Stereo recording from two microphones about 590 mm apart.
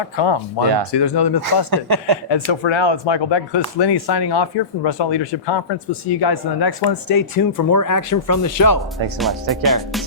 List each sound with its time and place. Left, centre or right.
0.2 s speech: left
1.7 s speech: right
2.3 s speech: left
9.1 s music: centre